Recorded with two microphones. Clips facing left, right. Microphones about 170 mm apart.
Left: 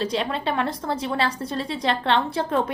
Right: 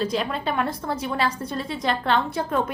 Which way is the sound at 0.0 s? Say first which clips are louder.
Even; 30° left (ahead or behind).